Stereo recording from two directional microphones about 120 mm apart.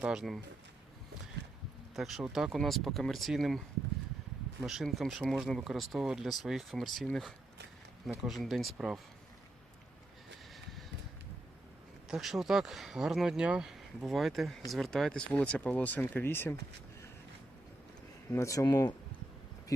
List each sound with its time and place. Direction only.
0.0 s speech: 5° right (ahead or behind)
2.0 s speech: centre (ahead or behind)
4.6 s speech: 5° right (ahead or behind)
12.0 s speech: 5° right (ahead or behind); by 16.6 s 15° left (ahead or behind)
18.3 s speech: 25° left (ahead or behind)